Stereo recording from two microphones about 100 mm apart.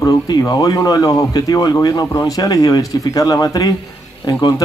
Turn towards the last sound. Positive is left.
turn(degrees=40)  # may be behind; listen again after turning